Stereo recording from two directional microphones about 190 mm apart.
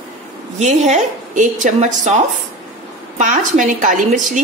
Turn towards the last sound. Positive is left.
turn(degrees=-45)  # may be behind; listen again after turning